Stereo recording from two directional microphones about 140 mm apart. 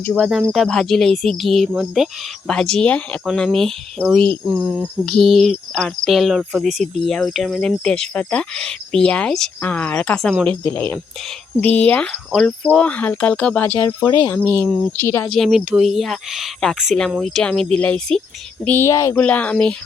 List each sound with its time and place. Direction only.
0.1 s speech: centre (ahead or behind)
4.5 s speech: 15° right (ahead or behind)
5.0 s speech: centre (ahead or behind)
15.3 s speech: centre (ahead or behind); by 19.1 s 20° left (ahead or behind)
19.1 s speech: 10° left (ahead or behind)